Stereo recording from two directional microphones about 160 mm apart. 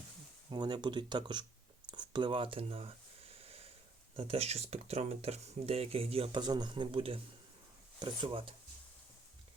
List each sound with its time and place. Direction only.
0.5 s speech: 25° right (ahead or behind)
1.9 s a sound: 30° right (ahead or behind)
4.2 s speech: 40° right (ahead or behind)